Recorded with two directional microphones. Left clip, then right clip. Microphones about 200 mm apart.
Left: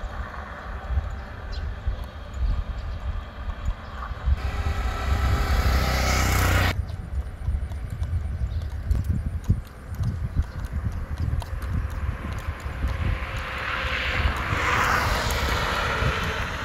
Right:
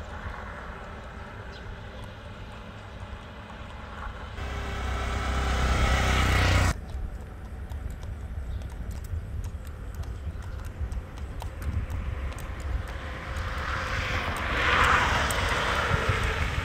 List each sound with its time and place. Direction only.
0.1 s vehicle: 10° right (ahead or behind)
4.4 s vehicle: centre (ahead or behind); by 6.0 s 25° left (ahead or behind)
6.0 s a sound: 50° left (ahead or behind)
12.9 s vehicle: 30° left (ahead or behind); by 15.3 s 55° left (ahead or behind)
15.6 s vehicle: 5° left (ahead or behind); by 16.6 s 20° right (ahead or behind)